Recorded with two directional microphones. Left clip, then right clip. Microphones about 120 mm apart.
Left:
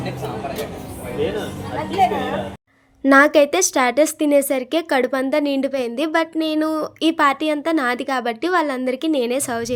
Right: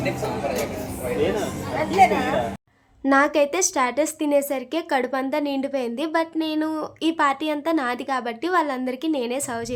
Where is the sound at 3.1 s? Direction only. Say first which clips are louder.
Left 6 dB; 40° left (ahead or behind).